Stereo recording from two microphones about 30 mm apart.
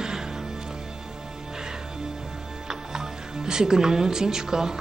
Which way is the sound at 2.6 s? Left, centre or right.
Right.